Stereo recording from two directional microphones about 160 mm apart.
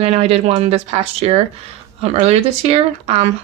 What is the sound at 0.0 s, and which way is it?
Speech, 40° right (ahead or behind).